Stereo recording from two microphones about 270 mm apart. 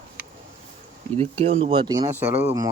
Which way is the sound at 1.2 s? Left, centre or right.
Right.